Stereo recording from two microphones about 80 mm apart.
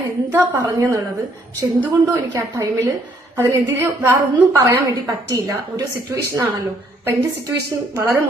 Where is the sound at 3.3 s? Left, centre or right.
Right.